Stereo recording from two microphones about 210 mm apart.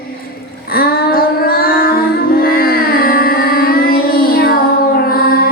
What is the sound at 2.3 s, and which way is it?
Music, 45° left (ahead or behind).